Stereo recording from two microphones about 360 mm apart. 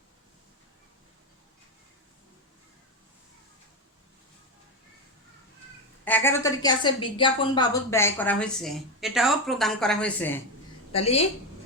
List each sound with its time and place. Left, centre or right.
6.1 s a woman's voice: centre
10.9 s a woman's voice: centre